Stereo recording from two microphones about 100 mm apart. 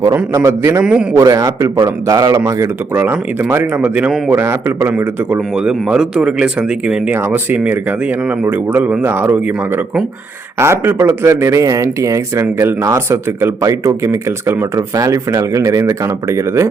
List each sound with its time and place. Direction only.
0.1 s a man's voice: 25° right (ahead or behind)
3.0 s a man's voice: 20° right (ahead or behind)
7.2 s speech: 25° right (ahead or behind)